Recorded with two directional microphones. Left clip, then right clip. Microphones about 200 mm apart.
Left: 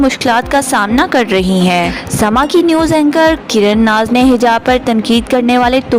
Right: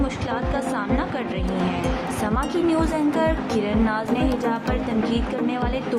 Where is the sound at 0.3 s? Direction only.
55° left (ahead or behind).